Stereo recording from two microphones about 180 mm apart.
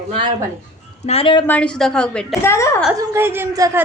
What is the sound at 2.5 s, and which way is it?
Speech, 15° left (ahead or behind).